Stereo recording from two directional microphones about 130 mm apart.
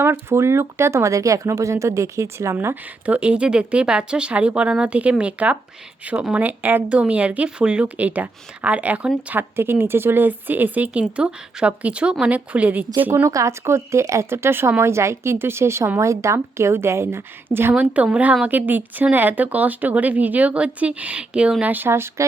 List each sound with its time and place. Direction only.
0.0 s speech: 20° right (ahead or behind)